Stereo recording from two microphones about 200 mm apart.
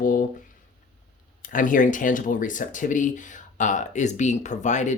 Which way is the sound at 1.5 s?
40° left (ahead or behind).